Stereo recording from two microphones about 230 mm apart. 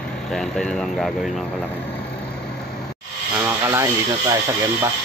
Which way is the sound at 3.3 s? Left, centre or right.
Centre.